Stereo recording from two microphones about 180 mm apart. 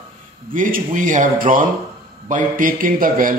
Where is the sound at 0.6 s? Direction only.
50° right (ahead or behind).